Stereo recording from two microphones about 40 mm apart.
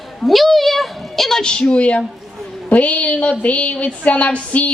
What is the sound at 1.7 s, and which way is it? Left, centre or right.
A woman's voice, left.